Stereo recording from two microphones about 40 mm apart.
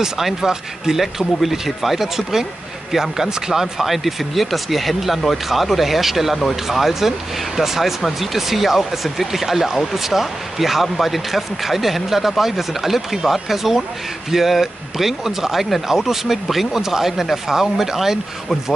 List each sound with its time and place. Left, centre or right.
0.0 s speech: centre
1.0 s speech: centre